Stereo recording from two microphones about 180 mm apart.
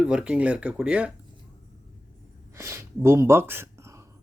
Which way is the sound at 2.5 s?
15° right (ahead or behind).